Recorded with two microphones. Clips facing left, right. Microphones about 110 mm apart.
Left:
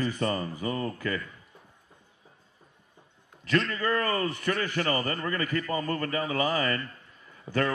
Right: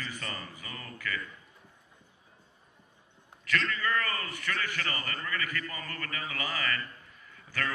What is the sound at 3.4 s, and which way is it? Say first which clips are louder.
Speech: left 5 dB; 30° left (ahead or behind).